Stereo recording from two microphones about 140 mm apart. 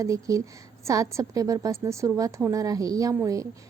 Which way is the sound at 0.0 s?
25° right (ahead or behind).